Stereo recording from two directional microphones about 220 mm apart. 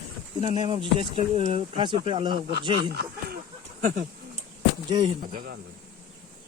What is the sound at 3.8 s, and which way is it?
Speech, 35° right (ahead or behind).